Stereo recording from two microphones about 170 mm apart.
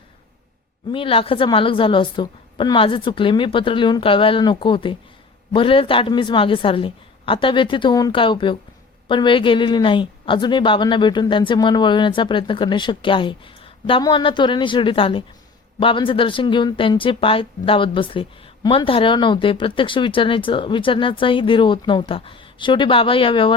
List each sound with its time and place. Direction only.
0.9 s a woman's voice: 30° left (ahead or behind)